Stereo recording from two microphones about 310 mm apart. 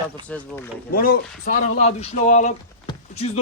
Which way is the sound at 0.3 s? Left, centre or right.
Centre.